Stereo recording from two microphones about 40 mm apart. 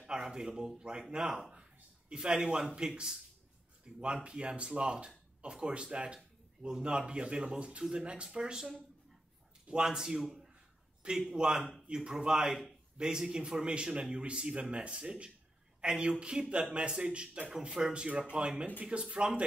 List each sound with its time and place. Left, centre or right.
0.0 s a man's voice: centre
1.6 s a sound: centre
2.3 s a man's voice: right
3.8 s a man's voice: right